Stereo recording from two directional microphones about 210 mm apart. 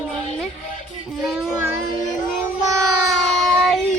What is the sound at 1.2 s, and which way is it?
Child singing, centre (ahead or behind).